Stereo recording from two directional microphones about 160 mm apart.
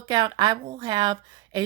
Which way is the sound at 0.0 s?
25° right (ahead or behind).